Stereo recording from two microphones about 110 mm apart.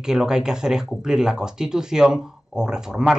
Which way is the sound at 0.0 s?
5° right (ahead or behind).